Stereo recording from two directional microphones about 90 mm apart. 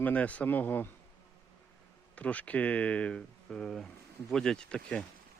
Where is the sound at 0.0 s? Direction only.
15° left (ahead or behind).